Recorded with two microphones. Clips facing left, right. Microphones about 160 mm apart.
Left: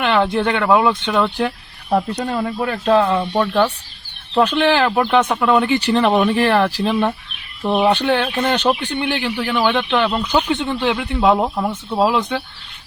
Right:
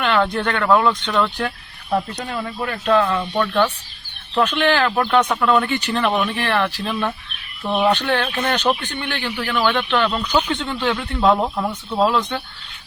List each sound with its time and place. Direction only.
0.0 s a man's voice: 20° left (ahead or behind)
1.4 s a man's voice: 25° left (ahead or behind)
5.8 s speech: 30° left (ahead or behind)
7.6 s a man's voice: 15° left (ahead or behind)
9.0 s a man's voice: 10° left (ahead or behind)